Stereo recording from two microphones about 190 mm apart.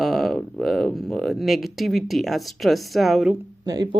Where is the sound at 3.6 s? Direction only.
20° right (ahead or behind).